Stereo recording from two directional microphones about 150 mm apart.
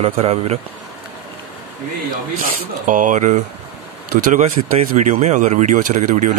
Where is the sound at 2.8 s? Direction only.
60° right (ahead or behind).